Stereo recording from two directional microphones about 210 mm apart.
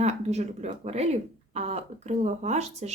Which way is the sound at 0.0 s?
30° right (ahead or behind).